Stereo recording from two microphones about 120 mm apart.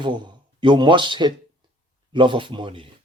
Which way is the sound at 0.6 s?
40° right (ahead or behind).